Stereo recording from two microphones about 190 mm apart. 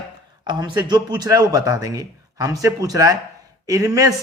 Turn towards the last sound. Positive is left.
turn(degrees=-20)  # may be behind; listen again after turning